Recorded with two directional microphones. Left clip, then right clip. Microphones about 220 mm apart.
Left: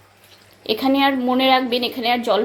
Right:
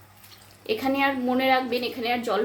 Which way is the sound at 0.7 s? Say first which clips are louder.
Left 6 dB; 20° left (ahead or behind).